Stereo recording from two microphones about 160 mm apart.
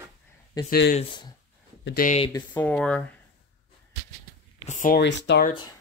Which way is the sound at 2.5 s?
10° left (ahead or behind).